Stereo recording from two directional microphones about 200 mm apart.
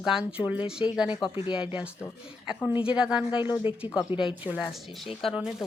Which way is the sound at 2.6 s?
5° right (ahead or behind).